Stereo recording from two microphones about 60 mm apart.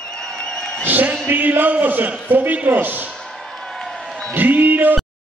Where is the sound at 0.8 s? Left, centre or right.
Right.